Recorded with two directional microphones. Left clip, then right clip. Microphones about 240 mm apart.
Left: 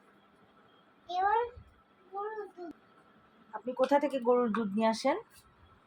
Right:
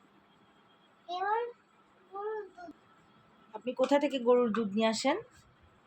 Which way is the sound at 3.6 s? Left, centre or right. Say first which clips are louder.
Even; centre.